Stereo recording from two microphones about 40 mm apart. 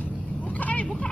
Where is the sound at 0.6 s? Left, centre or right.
Left.